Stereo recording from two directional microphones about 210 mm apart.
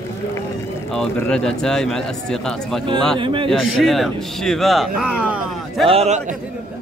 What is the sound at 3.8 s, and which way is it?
A man's voice, centre (ahead or behind).